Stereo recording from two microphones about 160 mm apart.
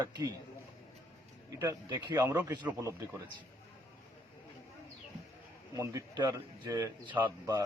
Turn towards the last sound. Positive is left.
turn(degrees=-20)  # may be behind; listen again after turning